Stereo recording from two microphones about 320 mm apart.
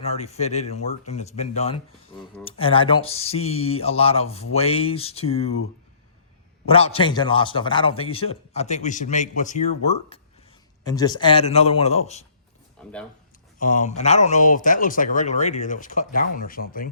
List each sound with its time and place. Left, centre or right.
0.0 s a man's voice: centre
6.7 s a man's voice: centre
13.6 s speech: left